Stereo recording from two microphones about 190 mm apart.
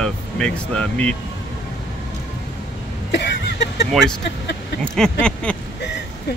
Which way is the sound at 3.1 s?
65° left (ahead or behind).